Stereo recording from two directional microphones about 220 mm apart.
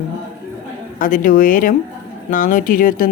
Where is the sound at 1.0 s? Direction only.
40° left (ahead or behind).